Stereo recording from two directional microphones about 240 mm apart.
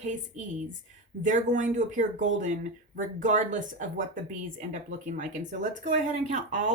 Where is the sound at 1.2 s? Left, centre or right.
Right.